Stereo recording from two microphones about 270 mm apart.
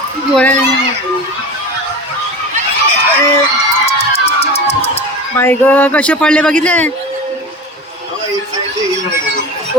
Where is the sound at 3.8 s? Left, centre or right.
Left.